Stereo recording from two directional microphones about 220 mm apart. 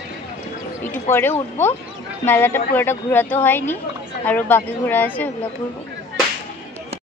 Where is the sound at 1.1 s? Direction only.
35° left (ahead or behind).